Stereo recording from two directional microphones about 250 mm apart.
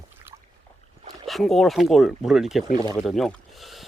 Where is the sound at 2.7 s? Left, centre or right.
Centre.